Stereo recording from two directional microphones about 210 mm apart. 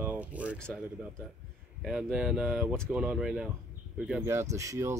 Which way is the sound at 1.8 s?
5° right (ahead or behind).